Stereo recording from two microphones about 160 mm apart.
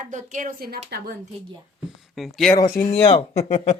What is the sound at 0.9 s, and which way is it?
Speech, 85° right.